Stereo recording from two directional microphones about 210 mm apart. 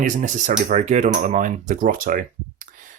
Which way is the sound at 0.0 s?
35° right (ahead or behind).